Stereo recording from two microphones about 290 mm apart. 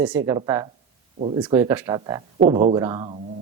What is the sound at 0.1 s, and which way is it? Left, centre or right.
Speech, centre.